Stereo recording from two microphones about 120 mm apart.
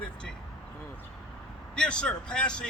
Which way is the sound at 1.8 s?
10° left (ahead or behind).